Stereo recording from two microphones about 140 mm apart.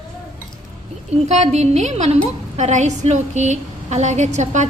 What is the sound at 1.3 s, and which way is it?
A woman's voice, 50° right (ahead or behind).